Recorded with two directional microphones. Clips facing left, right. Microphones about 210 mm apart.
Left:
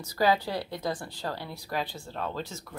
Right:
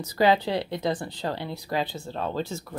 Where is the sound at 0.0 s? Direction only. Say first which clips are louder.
Right 4 dB; 25° right (ahead or behind).